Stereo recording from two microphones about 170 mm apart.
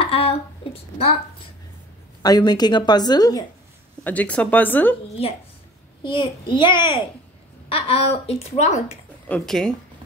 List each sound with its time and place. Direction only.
0.0 s a sound: 35° left (ahead or behind)
2.2 s a woman's voice: 25° left (ahead or behind)
4.0 s speech: 10° left (ahead or behind)
6.0 s a woman's voice: 30° left (ahead or behind)
9.3 s speech: centre (ahead or behind)